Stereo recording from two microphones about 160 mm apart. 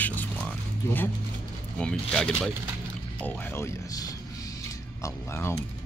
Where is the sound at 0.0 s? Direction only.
10° left (ahead or behind).